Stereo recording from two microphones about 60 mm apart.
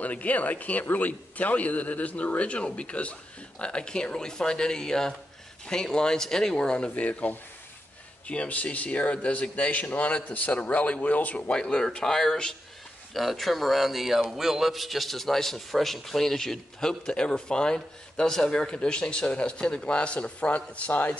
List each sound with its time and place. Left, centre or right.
0.0 s a man's voice: left
13.1 s a man's voice: centre; by 21.2 s left